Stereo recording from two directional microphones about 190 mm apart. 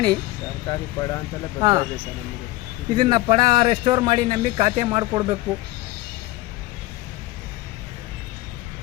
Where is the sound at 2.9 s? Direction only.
25° right (ahead or behind).